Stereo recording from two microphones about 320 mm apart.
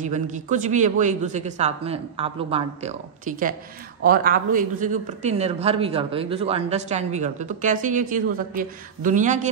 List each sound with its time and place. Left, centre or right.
0.0 s speech: right